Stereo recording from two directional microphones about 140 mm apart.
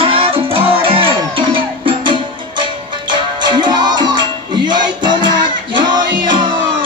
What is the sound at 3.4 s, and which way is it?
Music, 30° right (ahead or behind).